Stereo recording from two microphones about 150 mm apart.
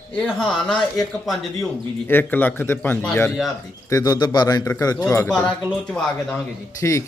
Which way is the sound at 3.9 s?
25° left (ahead or behind).